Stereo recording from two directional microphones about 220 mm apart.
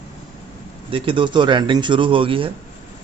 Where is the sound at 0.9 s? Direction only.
25° right (ahead or behind).